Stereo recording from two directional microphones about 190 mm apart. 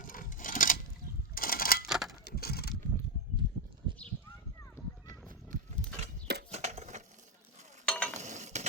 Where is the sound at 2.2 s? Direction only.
55° left (ahead or behind).